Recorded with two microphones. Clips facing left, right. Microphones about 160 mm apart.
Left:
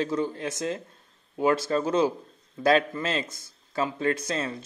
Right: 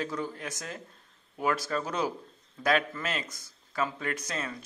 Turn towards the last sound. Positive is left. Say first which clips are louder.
# left 7 dB
turn(degrees=25)  # may be behind; listen again after turning